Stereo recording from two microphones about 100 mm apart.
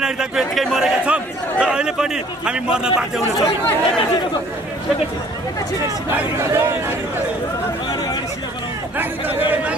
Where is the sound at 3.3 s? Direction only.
35° left (ahead or behind).